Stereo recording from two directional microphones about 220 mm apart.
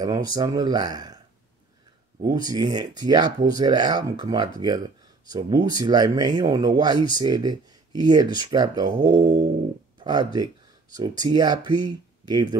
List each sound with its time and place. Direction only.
0.0 s speech: 15° right (ahead or behind)
2.2 s speech: 20° right (ahead or behind)